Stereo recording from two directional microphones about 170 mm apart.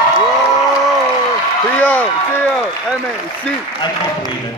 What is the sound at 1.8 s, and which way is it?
Speech, 10° left (ahead or behind).